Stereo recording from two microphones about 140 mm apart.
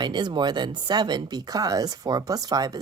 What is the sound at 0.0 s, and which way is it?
Speech, 30° right (ahead or behind).